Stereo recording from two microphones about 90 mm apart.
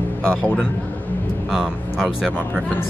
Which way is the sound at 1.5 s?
5° right (ahead or behind).